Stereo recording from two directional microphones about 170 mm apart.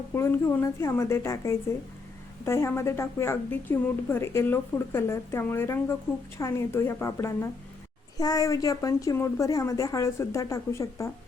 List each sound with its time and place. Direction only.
0.1 s a woman's voice: 15° left (ahead or behind)